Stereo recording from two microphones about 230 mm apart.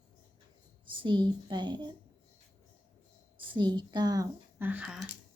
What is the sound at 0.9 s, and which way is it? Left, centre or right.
Speech, centre.